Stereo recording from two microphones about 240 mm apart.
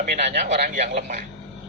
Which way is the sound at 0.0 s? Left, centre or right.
Right.